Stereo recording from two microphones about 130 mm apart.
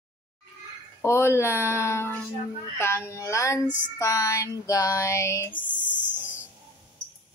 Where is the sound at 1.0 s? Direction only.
20° left (ahead or behind).